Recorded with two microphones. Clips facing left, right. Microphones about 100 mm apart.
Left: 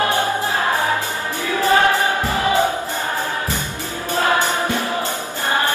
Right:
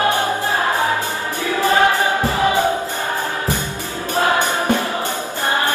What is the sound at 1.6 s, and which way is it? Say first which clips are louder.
Music: even; 15° right (ahead or behind).